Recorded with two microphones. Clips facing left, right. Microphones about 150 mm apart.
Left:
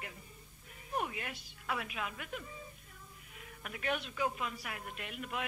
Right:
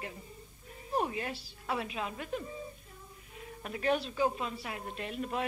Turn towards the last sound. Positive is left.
turn(degrees=-35)  # may be behind; listen again after turning